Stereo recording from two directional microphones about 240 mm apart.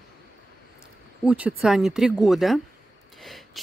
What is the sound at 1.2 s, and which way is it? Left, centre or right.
Speech, centre.